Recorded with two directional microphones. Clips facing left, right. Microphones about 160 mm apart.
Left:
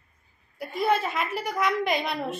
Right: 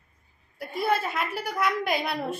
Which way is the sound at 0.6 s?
Centre (ahead or behind).